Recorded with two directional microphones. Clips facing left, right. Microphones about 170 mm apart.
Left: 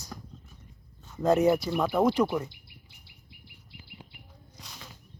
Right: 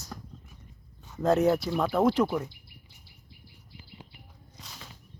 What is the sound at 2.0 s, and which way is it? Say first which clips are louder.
Speech: right 1 dB; 5° right (ahead or behind).